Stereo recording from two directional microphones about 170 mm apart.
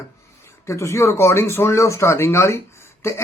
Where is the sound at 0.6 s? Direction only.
15° left (ahead or behind).